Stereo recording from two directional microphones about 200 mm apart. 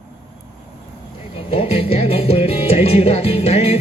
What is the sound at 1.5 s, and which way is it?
Music, 30° left (ahead or behind).